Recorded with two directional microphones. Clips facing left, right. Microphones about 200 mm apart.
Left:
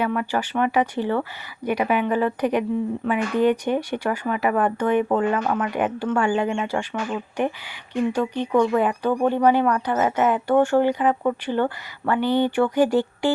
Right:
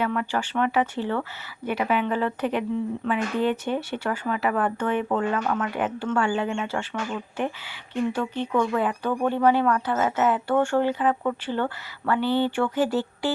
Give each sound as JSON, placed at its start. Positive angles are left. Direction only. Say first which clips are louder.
{"t": 0.0, "sound": "speech", "louder": "left 2 dB", "side_deg": 10}
{"t": 8.1, "sound": "speech", "louder": "left 4 dB", "side_deg": 15}